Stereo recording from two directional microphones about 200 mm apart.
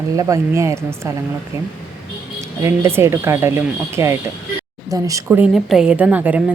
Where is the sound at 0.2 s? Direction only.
15° right (ahead or behind).